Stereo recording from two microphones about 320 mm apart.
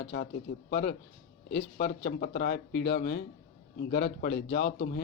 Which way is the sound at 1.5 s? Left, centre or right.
Left.